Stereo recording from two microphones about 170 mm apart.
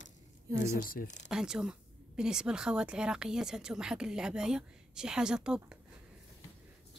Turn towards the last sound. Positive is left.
turn(degrees=-5)  # may be behind; listen again after turning